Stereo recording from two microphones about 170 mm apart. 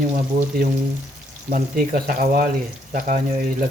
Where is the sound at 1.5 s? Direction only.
55° right (ahead or behind).